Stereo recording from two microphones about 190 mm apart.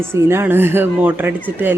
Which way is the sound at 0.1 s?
10° right (ahead or behind).